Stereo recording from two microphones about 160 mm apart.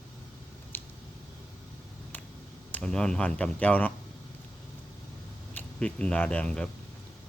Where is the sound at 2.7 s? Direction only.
5° left (ahead or behind).